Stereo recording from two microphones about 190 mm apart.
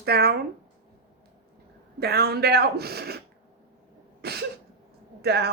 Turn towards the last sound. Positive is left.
turn(degrees=-60)  # may be behind; listen again after turning